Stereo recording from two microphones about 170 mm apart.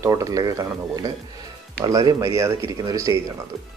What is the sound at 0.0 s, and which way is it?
Speech, 20° right (ahead or behind).